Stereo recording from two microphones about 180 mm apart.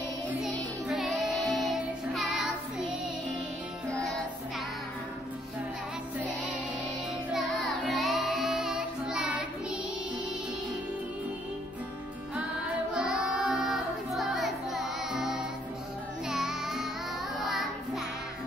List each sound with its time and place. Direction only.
0.4 s music: 5° right (ahead or behind)
7.3 s music: centre (ahead or behind)
12.9 s music: 5° right (ahead or behind)